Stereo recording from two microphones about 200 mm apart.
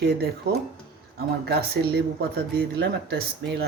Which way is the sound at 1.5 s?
55° right (ahead or behind).